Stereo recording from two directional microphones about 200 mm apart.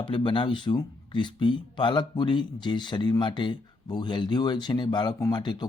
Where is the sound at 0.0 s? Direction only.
25° left (ahead or behind).